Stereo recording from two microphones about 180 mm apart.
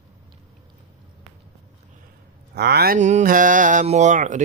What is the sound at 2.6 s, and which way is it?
Speech, 65° right (ahead or behind).